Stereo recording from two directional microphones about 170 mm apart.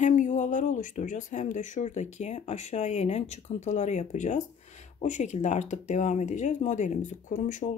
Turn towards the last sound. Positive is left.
turn(degrees=50)  # may be behind; listen again after turning